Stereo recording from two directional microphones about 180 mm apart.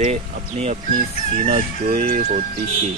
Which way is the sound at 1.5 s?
45° right (ahead or behind).